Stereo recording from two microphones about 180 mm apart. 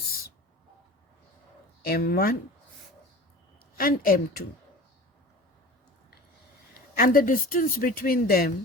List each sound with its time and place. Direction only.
1.8 s speech: 55° left (ahead or behind)
3.8 s speech: 55° left (ahead or behind)
6.9 s speech: 50° left (ahead or behind)